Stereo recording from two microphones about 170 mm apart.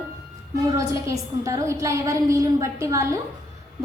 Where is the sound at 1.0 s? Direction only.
20° right (ahead or behind).